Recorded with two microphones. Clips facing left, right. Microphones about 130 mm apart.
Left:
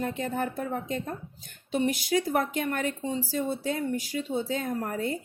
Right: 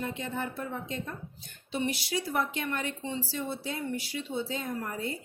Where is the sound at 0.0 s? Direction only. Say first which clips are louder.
Left 5 dB; 50° left (ahead or behind).